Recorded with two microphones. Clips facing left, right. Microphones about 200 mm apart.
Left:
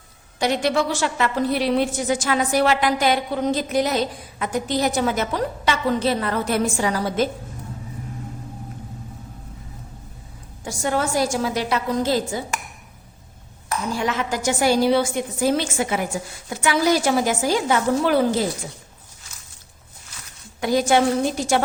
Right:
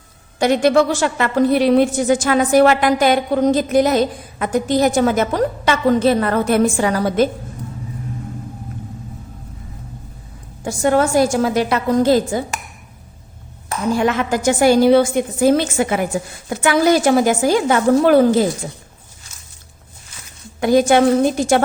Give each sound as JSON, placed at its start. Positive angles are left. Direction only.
{"t": 0.3, "sound": "a woman's voice", "side_deg": -50}
{"t": 10.6, "sound": "a woman's voice", "side_deg": -55}
{"t": 13.9, "sound": "a woman's voice", "side_deg": -55}
{"t": 20.6, "sound": "a woman's voice", "side_deg": -55}